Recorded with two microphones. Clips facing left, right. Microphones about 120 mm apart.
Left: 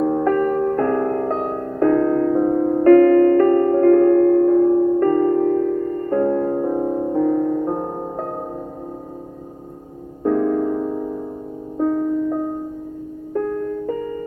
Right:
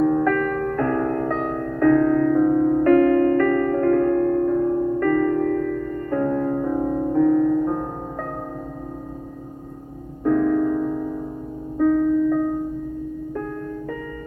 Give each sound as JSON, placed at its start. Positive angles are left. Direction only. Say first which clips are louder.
{"t": 0.0, "sound": "music", "louder": "left 1 dB", "side_deg": 25}
{"t": 10.2, "sound": "music", "louder": "even", "side_deg": 30}